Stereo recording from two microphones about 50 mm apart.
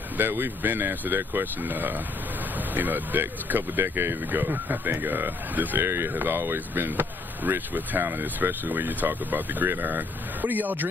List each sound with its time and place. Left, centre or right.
0.2 s speech: right
3.8 s speech: right
5.8 s speech: right